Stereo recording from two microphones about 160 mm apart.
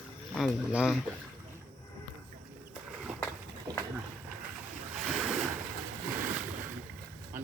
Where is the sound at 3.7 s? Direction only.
25° right (ahead or behind).